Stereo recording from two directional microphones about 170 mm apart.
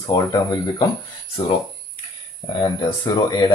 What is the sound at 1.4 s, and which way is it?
Speech, 35° left (ahead or behind).